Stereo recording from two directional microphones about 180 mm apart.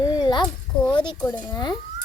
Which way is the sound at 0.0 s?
20° left (ahead or behind).